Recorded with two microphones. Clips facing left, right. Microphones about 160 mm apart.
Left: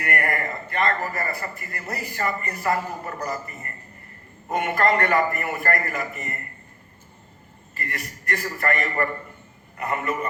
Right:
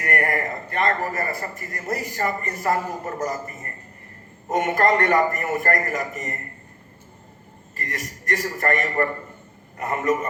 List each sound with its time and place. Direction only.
0.0 s a man's voice: 40° right (ahead or behind)
7.8 s a man's voice: 40° right (ahead or behind)